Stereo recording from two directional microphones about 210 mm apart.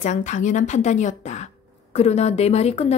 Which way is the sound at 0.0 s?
35° left (ahead or behind).